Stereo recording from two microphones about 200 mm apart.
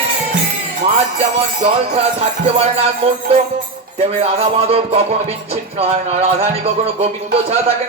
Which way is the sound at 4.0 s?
30° right (ahead or behind).